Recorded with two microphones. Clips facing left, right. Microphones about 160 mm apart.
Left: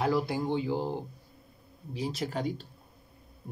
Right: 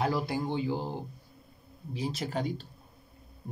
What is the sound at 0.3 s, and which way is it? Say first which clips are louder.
Speech: left 1 dB; 15° left (ahead or behind).